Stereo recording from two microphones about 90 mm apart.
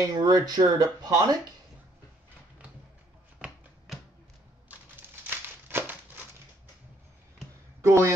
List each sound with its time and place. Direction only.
0.0 s speech: 45° right (ahead or behind)
3.3 s a sound: 10° right (ahead or behind)
4.9 s crumpling: 25° right (ahead or behind)
7.8 s speech: 30° right (ahead or behind)